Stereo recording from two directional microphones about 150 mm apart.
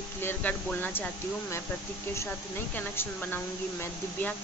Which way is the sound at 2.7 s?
10° left (ahead or behind).